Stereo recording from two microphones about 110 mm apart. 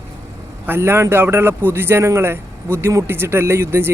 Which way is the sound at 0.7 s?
25° right (ahead or behind).